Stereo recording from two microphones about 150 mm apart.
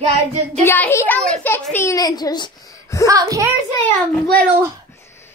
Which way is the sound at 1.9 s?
25° left (ahead or behind).